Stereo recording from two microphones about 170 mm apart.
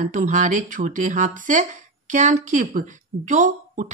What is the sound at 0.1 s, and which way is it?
Speech, 45° right (ahead or behind).